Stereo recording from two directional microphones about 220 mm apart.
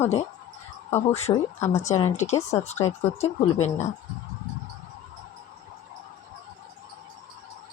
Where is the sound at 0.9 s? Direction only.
30° left (ahead or behind).